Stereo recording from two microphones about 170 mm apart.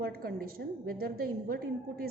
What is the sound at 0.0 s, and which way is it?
A woman's voice, 60° right (ahead or behind).